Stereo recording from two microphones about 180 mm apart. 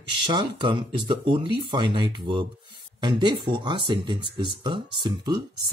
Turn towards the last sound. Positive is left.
turn(degrees=-25)  # may be behind; listen again after turning